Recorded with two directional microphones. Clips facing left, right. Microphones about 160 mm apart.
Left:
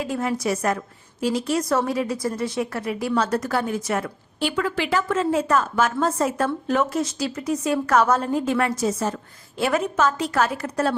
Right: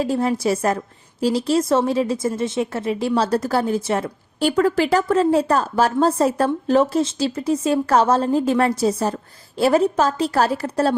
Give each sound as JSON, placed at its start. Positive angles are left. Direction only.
{"t": 0.0, "sound": "a woman's voice", "side_deg": -30}
{"t": 4.4, "sound": "a woman's voice", "side_deg": -40}